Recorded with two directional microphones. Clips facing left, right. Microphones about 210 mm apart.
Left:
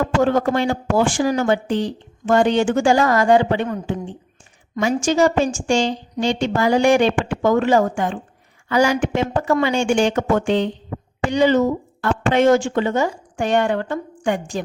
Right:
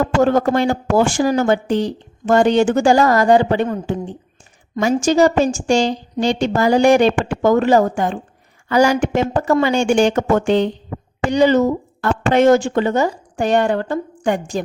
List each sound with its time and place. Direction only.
0.2 s speech: 40° right (ahead or behind)